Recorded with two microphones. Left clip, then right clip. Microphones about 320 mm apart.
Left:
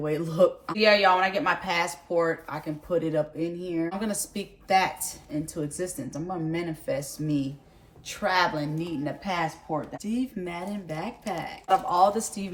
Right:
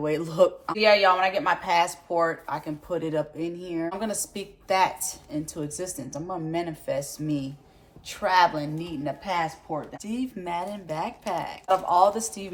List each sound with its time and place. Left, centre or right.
0.0 s a woman's voice: centre